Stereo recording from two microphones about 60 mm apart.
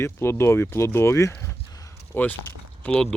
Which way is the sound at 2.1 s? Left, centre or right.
Left.